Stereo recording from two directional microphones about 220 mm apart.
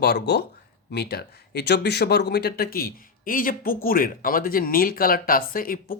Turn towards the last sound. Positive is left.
turn(degrees=40)  # may be behind; listen again after turning